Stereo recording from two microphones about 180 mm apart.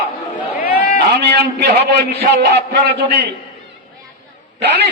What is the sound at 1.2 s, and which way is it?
A man's voice, 65° right (ahead or behind).